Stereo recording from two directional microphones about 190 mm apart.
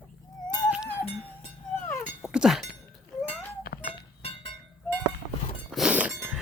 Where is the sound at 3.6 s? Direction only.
55° left (ahead or behind).